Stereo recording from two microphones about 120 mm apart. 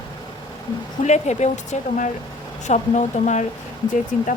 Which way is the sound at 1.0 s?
70° left (ahead or behind).